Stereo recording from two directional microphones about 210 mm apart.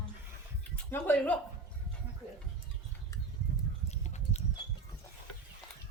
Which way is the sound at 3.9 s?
30° left (ahead or behind).